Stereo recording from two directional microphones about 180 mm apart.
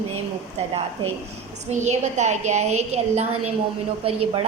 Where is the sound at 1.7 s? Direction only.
40° right (ahead or behind).